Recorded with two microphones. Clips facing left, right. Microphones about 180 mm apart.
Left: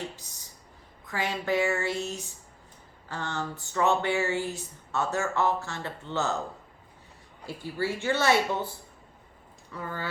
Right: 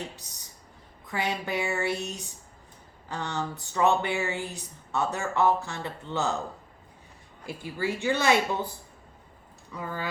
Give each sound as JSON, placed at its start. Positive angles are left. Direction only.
{"t": 1.0, "sound": "speech", "side_deg": -15}
{"t": 7.4, "sound": "speech", "side_deg": -15}
{"t": 9.7, "sound": "speech", "side_deg": -15}